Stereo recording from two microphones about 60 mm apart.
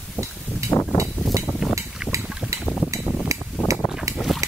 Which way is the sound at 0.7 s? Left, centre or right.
Left.